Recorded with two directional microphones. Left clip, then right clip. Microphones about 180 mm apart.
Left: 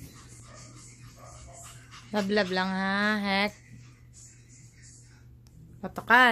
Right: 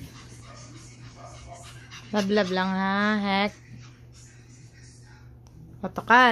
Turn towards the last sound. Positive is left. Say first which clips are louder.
# right 2 dB
turn(degrees=-5)  # may be behind; listen again after turning